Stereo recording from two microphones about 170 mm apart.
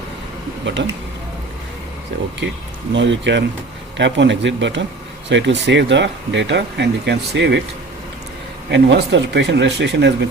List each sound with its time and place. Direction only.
0.6 s speech: 90° right
2.9 s speech: 90° right
8.7 s speech: 90° right